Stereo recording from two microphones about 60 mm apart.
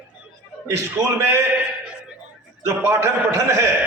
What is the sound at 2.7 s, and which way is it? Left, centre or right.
A man's voice, right.